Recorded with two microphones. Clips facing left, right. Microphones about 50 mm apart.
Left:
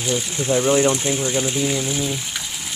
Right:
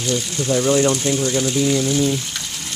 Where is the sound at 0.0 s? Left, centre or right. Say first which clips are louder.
Right 1 dB; centre.